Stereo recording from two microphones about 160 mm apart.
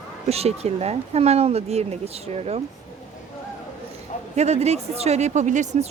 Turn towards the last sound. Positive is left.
turn(degrees=-45)  # may be behind; listen again after turning